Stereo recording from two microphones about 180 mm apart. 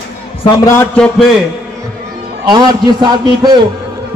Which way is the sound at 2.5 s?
25° right (ahead or behind).